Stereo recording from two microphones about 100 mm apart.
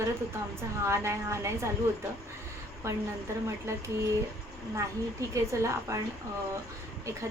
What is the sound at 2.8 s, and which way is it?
Speech, 25° right (ahead or behind).